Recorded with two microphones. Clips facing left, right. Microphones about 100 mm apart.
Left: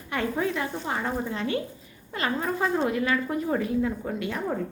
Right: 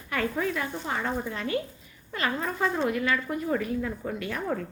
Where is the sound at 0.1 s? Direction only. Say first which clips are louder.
Left 1 dB; 25° left (ahead or behind).